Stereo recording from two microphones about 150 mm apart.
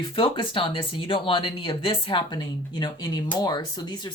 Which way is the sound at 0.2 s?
35° left (ahead or behind).